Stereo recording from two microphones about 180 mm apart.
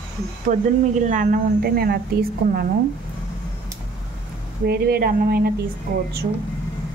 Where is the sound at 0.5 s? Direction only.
45° right (ahead or behind).